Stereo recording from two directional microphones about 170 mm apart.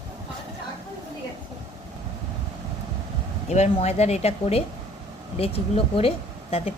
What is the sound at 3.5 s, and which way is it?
Speech, 40° left (ahead or behind).